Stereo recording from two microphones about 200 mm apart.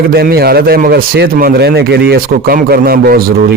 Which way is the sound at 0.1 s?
50° right (ahead or behind).